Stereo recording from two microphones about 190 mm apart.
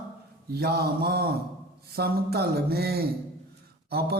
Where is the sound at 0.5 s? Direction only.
55° right (ahead or behind).